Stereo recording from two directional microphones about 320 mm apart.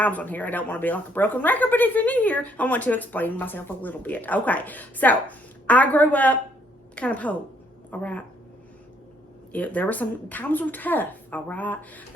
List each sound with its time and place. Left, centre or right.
0.0 s a woman's voice: centre
9.5 s speech: centre